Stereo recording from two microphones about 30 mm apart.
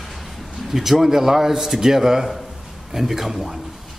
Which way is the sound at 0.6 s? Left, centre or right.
Centre.